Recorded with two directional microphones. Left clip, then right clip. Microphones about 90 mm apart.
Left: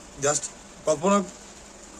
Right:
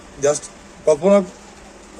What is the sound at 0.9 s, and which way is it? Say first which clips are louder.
Speech: right 8 dB; 20° left (ahead or behind).